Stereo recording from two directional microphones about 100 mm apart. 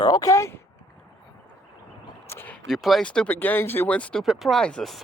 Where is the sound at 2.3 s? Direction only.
20° left (ahead or behind).